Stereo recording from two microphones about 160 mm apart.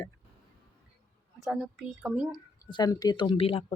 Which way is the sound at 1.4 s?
5° right (ahead or behind).